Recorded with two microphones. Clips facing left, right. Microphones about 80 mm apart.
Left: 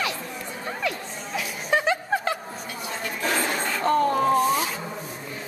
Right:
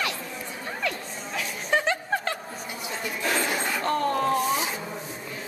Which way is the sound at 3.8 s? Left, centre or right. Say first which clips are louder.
Left 5 dB; centre.